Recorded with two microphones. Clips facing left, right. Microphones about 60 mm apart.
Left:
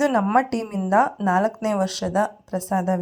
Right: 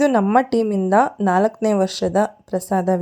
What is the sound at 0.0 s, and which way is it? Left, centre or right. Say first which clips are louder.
Speech: right 4 dB; right.